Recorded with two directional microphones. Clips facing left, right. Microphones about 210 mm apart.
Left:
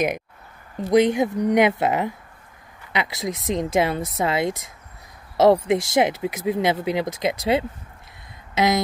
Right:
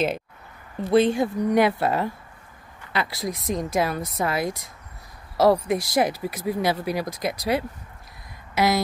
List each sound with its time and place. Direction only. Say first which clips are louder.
0.7 s speech: left 2 dB; 20° left (ahead or behind)